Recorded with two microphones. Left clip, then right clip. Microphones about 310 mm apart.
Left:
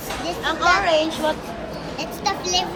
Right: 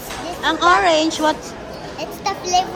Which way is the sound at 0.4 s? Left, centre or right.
Right.